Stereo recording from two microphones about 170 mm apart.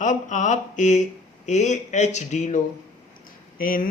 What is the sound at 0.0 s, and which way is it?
Speech, 45° left (ahead or behind).